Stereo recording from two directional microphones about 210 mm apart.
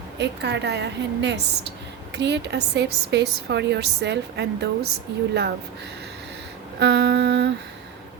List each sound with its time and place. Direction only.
0.2 s a woman's voice: 55° right (ahead or behind)
6.7 s a woman's voice: 55° right (ahead or behind)